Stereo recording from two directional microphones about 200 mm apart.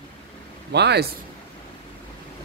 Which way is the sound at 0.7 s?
55° right (ahead or behind).